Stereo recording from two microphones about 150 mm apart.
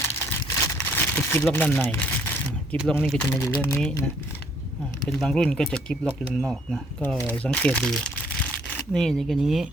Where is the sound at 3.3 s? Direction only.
15° left (ahead or behind).